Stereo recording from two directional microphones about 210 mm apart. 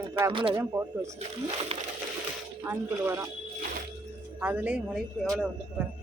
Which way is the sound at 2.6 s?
15° right (ahead or behind).